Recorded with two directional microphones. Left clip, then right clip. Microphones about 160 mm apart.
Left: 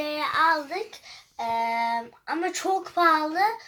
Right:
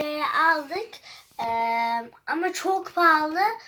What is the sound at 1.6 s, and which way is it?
Speech, 30° left (ahead or behind).